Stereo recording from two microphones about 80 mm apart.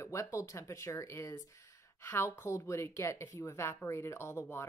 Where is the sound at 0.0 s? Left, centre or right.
Left.